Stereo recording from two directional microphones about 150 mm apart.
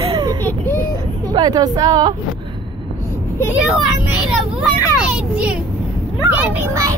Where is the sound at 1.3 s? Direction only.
25° right (ahead or behind).